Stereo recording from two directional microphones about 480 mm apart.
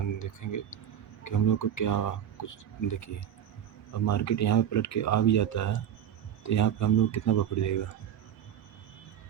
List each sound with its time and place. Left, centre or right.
0.2 s speech: left